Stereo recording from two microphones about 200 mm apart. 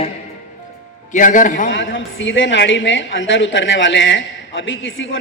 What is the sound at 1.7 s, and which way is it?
A woman's voice, 65° left (ahead or behind).